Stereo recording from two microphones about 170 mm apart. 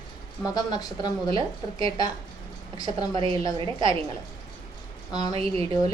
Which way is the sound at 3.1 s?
30° right (ahead or behind).